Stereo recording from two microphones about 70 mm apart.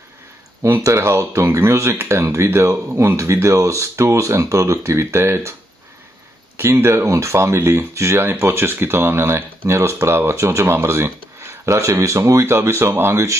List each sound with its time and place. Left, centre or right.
0.6 s speech: right
6.6 s speech: right